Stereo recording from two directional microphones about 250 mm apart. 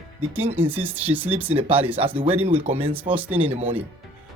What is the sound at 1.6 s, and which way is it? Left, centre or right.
Speech, right.